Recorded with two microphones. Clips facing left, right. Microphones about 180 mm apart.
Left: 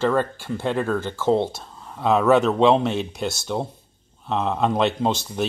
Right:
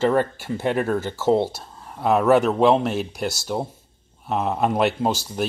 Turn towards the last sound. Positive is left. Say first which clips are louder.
# even
turn(degrees=-5)  # may be behind; listen again after turning